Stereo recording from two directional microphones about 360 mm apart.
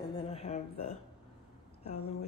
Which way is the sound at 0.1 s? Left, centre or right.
Centre.